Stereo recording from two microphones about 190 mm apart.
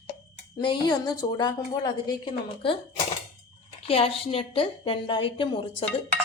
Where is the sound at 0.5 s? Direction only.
20° left (ahead or behind).